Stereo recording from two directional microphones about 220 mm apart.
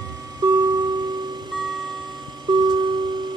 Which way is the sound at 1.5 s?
Centre (ahead or behind).